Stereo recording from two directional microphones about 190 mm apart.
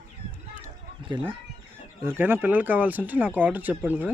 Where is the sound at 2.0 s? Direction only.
10° right (ahead or behind).